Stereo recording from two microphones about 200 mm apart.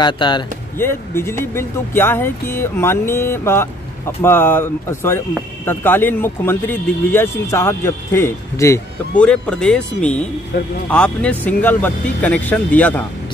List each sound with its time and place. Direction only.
0.0 s speech: 20° left (ahead or behind)
0.7 s speech: 10° left (ahead or behind)